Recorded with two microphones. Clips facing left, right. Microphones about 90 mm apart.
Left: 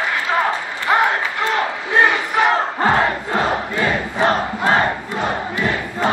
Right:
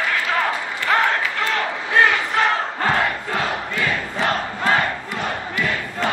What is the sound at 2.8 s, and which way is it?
Crowd, 25° left (ahead or behind).